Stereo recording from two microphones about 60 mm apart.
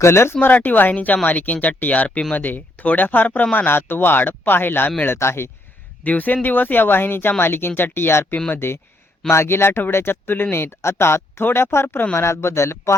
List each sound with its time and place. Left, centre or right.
0.0 s speech: left
0.4 s speech: left
6.0 s speech: left